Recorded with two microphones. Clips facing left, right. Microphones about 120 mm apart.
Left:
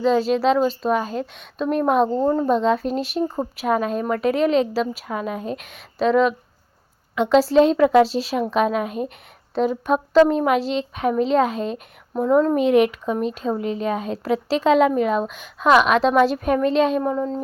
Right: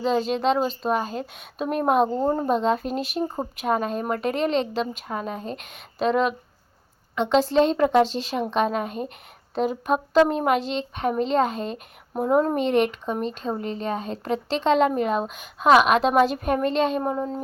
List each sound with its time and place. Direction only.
0.0 s speech: centre (ahead or behind)
12.1 s a woman's voice: 10° right (ahead or behind)
12.5 s speech: 5° left (ahead or behind)